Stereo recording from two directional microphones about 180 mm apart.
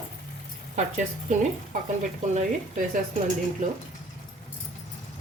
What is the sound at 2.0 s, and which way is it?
Speech, 45° right (ahead or behind).